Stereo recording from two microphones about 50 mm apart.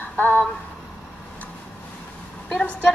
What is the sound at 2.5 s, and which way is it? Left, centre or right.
Speech, left.